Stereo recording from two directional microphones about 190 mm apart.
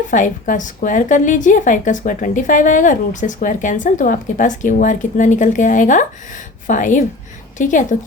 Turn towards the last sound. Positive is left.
turn(degrees=40)  # may be behind; listen again after turning